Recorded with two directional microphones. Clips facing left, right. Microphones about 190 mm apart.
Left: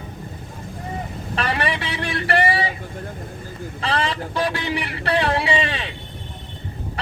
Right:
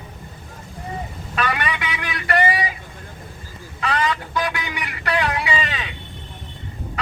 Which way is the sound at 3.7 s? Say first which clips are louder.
Right 1 dB; 30° left (ahead or behind).